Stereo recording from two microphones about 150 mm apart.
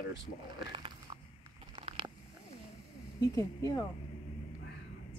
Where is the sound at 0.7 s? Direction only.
30° right (ahead or behind).